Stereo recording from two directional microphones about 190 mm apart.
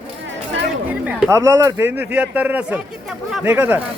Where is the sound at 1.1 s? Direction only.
10° right (ahead or behind).